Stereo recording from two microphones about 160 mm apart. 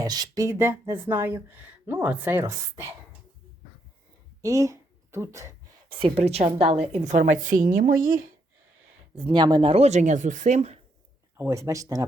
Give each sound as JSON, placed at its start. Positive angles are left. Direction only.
{"t": 0.0, "sound": "speech", "side_deg": -25}
{"t": 4.4, "sound": "a sound", "side_deg": -20}
{"t": 5.9, "sound": "a woman's voice", "side_deg": -35}
{"t": 9.1, "sound": "speech", "side_deg": -30}
{"t": 11.3, "sound": "speech", "side_deg": -20}